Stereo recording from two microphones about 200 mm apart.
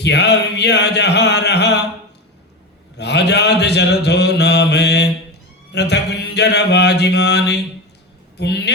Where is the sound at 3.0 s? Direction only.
55° left (ahead or behind).